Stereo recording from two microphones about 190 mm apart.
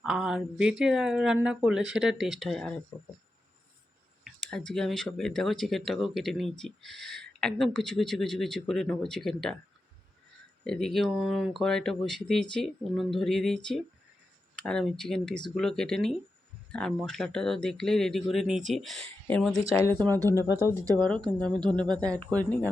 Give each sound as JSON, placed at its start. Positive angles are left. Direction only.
{"t": 0.0, "sound": "speech", "side_deg": 0}
{"t": 4.4, "sound": "speech", "side_deg": 0}
{"t": 10.6, "sound": "speech", "side_deg": 5}
{"t": 20.6, "sound": "speech", "side_deg": -15}
{"t": 21.9, "sound": "speech", "side_deg": 5}